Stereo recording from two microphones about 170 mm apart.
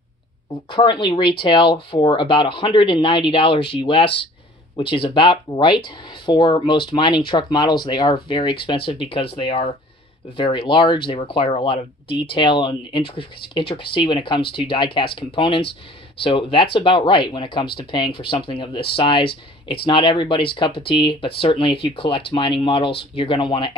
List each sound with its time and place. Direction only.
0.7 s speech: 30° left (ahead or behind)
19.2 s speech: 70° left (ahead or behind)
19.9 s speech: 30° left (ahead or behind)